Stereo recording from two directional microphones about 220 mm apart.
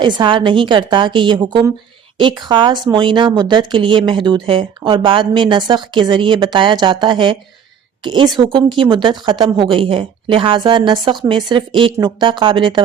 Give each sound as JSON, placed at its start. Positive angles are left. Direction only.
{"t": 0.0, "sound": "speech", "side_deg": -20}